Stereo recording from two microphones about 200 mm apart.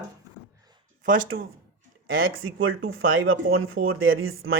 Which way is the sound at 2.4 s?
90° right.